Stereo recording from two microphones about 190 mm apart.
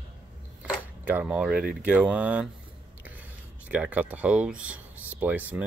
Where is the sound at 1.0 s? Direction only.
5° right (ahead or behind).